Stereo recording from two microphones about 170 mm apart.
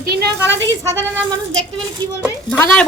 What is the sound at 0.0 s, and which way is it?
Speech, 75° right (ahead or behind).